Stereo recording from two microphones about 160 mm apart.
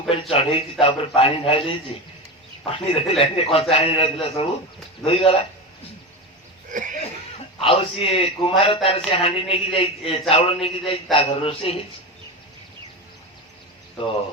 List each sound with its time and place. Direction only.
0.1 s a man's voice: 35° left (ahead or behind)
6.7 s a sound: 55° right (ahead or behind)
7.6 s a man's voice: 35° left (ahead or behind)
14.0 s a man's voice: 35° left (ahead or behind)